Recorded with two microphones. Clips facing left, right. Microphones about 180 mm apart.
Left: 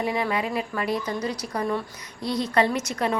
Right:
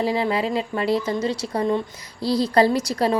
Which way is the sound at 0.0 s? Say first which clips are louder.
Right 4 dB; 30° right (ahead or behind).